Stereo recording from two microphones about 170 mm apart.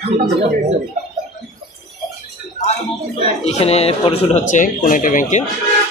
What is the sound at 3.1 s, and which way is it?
Speech, 35° left (ahead or behind).